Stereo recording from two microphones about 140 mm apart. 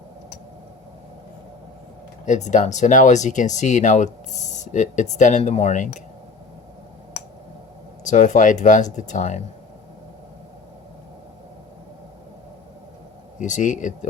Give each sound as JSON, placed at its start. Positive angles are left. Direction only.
{"t": 2.2, "sound": "speech", "side_deg": 60}
{"t": 8.0, "sound": "speech", "side_deg": 65}
{"t": 13.4, "sound": "speech", "side_deg": 65}